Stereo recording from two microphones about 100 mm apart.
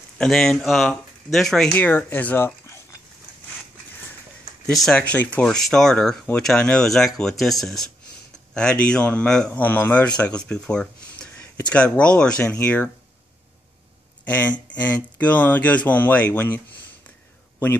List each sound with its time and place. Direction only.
0.2 s speech: 5° left (ahead or behind)
1.7 s speech: 20° left (ahead or behind)
4.6 s speech: 5° left (ahead or behind)
5.0 s a man's voice: 15° left (ahead or behind)
5.4 s a man's voice: 5° left (ahead or behind)
14.2 s a man's voice: 15° left (ahead or behind)